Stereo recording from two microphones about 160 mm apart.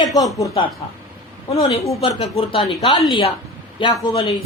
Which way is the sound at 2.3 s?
35° left (ahead or behind).